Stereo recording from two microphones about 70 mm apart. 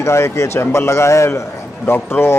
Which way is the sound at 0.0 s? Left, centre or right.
Left.